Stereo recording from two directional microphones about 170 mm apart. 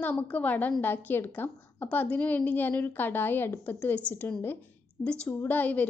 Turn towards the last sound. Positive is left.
turn(degrees=10)  # may be behind; listen again after turning